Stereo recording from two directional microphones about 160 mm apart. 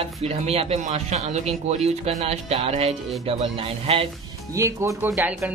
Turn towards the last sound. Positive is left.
turn(degrees=-5)  # may be behind; listen again after turning